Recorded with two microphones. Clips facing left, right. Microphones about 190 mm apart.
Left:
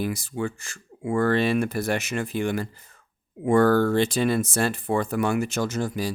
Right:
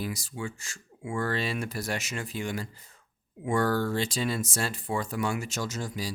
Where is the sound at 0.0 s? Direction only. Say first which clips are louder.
Left 7 dB; 55° left (ahead or behind).